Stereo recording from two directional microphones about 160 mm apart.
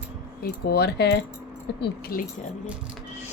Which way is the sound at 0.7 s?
90° left.